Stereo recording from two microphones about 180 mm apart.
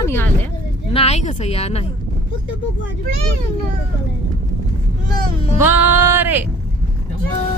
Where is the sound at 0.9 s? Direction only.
35° left (ahead or behind).